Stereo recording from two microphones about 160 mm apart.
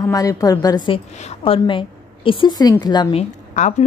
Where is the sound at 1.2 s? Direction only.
35° left (ahead or behind).